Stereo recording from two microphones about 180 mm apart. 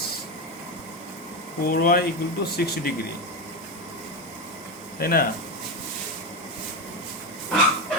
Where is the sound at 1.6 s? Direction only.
55° left (ahead or behind).